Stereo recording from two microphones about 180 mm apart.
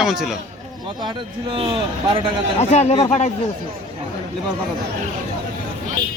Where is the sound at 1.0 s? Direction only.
30° right (ahead or behind).